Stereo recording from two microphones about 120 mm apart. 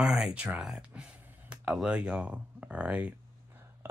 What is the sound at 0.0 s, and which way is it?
Speech, 5° right (ahead or behind).